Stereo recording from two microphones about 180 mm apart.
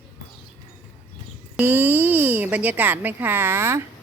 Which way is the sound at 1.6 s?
10° right (ahead or behind).